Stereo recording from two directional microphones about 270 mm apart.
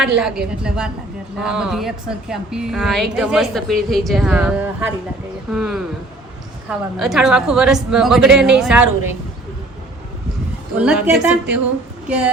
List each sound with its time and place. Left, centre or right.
0.2 s a woman's voice: centre
10.8 s a woman's voice: centre